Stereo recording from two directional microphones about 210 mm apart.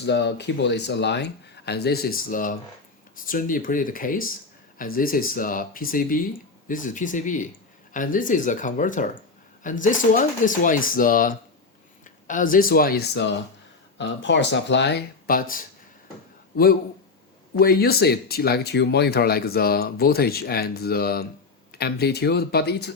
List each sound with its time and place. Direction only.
0.0 s speech: 55° left (ahead or behind)
17.6 s speech: 45° left (ahead or behind)